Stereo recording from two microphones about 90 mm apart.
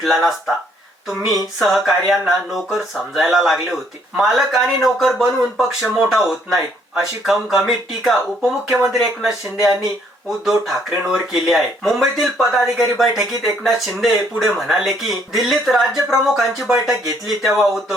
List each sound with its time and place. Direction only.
0.0 s speech: centre (ahead or behind)